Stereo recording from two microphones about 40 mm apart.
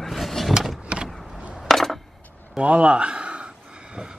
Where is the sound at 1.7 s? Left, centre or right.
Centre.